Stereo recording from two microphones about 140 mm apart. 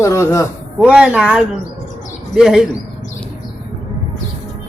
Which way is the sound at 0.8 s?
10° right (ahead or behind).